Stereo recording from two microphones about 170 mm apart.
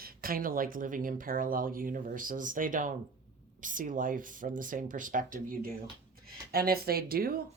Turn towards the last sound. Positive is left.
turn(degrees=-60)  # may be behind; listen again after turning